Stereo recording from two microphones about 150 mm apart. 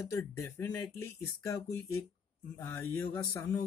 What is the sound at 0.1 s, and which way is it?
Speech, 20° left (ahead or behind).